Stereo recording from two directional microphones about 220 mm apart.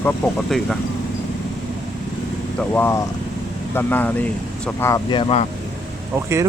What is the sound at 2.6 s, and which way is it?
Speech, 10° left (ahead or behind).